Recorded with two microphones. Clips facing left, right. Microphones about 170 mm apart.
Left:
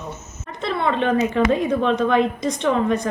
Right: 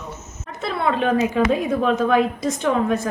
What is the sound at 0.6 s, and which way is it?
A woman's voice, 5° right (ahead or behind).